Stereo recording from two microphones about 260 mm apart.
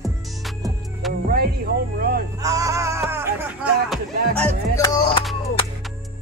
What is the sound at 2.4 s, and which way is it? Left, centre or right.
Music, centre.